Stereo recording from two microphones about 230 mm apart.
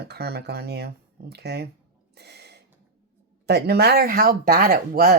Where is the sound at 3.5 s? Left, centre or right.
Right.